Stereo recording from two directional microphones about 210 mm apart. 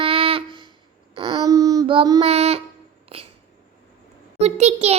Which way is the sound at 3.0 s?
30° right (ahead or behind).